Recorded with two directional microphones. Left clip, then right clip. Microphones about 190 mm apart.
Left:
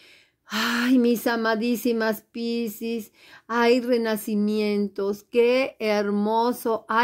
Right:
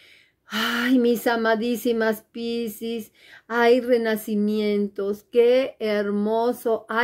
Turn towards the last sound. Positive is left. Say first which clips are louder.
# right 1 dB
turn(degrees=30)  # may be behind; listen again after turning